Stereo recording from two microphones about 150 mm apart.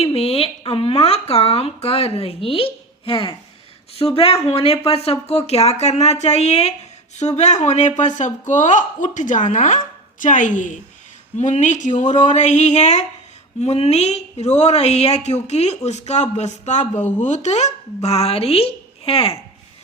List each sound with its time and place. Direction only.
0.0 s speech: 40° left (ahead or behind)